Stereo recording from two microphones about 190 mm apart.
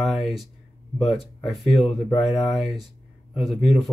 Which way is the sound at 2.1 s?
30° left (ahead or behind).